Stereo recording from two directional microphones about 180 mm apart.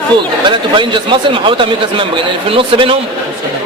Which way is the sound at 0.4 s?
25° right (ahead or behind).